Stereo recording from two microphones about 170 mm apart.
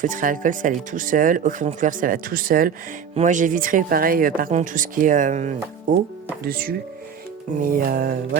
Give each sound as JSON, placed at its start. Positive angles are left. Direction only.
{"t": 0.0, "sound": "speech", "side_deg": -50}
{"t": 6.4, "sound": "music", "side_deg": -65}